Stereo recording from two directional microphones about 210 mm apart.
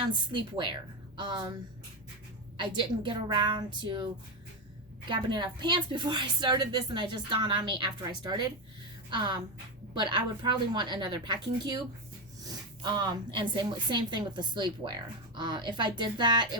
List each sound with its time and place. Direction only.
0.1 s a woman's voice: 20° right (ahead or behind)
2.6 s a woman's voice: 25° right (ahead or behind)